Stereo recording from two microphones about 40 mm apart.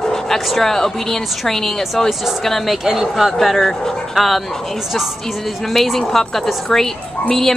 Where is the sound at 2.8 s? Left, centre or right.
Centre.